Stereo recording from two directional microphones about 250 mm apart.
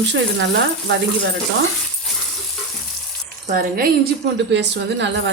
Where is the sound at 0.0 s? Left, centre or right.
Right.